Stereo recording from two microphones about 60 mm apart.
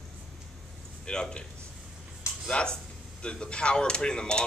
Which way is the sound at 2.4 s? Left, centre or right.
Centre.